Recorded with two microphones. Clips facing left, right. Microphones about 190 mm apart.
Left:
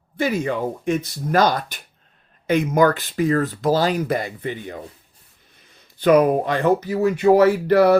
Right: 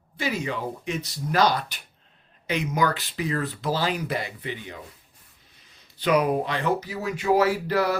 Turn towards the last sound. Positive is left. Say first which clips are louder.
# left 9 dB
turn(degrees=60)  # may be behind; listen again after turning